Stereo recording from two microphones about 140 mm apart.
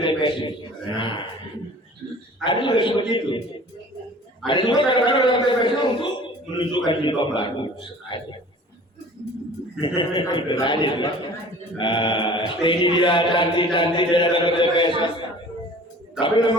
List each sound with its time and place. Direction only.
0.0 s a sound: 35° left (ahead or behind)
2.4 s a man's voice: 35° left (ahead or behind)
4.4 s a man's voice: 35° left (ahead or behind)
9.8 s a man's voice: 35° left (ahead or behind)
16.2 s a man's voice: 35° left (ahead or behind)